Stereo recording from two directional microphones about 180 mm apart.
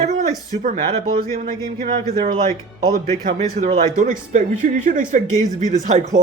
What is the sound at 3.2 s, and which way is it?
Speech, 40° right (ahead or behind).